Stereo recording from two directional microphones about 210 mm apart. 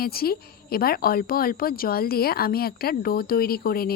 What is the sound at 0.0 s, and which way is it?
Speech, 45° left (ahead or behind).